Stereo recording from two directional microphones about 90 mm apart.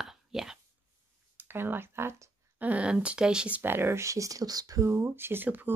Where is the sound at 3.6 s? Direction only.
25° right (ahead or behind); by 4.9 s 45° right (ahead or behind).